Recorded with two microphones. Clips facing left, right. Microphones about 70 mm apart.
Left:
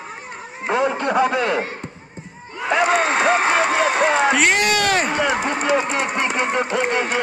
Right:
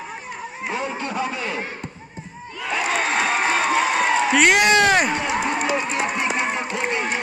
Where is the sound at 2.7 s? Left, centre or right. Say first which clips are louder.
Left 6 dB; left.